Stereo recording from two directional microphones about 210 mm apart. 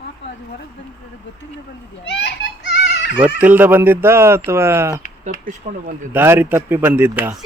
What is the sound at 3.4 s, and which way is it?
Speech, 10° right (ahead or behind).